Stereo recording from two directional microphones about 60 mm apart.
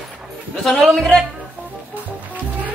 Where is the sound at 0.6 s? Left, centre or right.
Centre.